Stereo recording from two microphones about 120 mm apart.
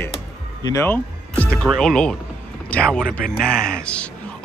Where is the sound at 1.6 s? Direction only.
5° left (ahead or behind).